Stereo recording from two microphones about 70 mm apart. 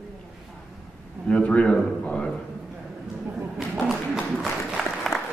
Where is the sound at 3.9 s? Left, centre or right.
Centre.